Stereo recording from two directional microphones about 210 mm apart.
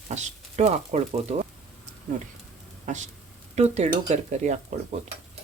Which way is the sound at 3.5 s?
30° right (ahead or behind).